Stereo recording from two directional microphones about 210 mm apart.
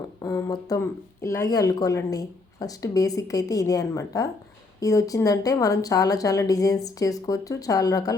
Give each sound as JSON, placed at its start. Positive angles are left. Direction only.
{"t": 0.2, "sound": "speech", "side_deg": 15}